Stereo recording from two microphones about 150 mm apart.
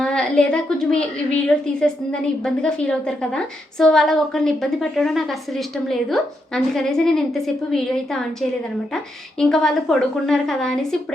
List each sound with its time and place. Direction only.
0.0 s a woman's voice: 5° left (ahead or behind)